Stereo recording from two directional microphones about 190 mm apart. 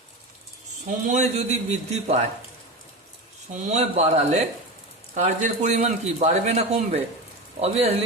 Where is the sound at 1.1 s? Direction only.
35° right (ahead or behind).